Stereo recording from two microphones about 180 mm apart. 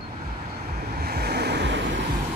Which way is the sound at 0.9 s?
60° right (ahead or behind).